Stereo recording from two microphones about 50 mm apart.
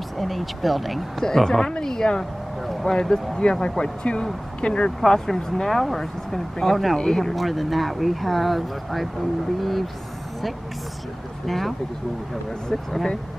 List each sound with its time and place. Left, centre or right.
0.2 s speech: centre
5.0 s speech: centre
11.4 s speech: centre